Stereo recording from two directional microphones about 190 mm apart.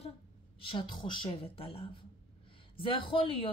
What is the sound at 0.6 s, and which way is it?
Speech, 25° left (ahead or behind).